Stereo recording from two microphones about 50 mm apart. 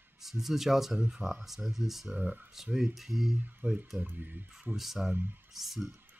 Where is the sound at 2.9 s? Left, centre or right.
Centre.